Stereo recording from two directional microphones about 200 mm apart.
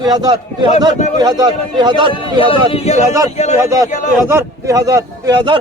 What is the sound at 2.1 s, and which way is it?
Speech, 25° left (ahead or behind).